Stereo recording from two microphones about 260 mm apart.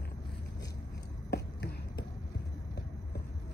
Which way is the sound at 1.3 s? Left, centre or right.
Left.